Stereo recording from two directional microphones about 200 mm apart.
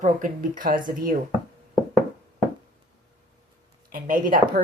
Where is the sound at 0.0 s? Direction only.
40° right (ahead or behind).